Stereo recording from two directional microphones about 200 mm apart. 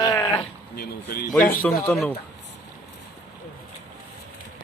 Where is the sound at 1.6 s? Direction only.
5° left (ahead or behind).